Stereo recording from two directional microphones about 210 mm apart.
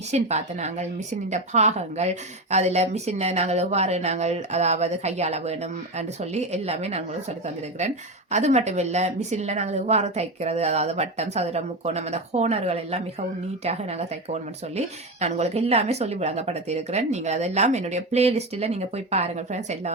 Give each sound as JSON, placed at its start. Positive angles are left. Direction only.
{"t": 0.1, "sound": "a woman's voice", "side_deg": -30}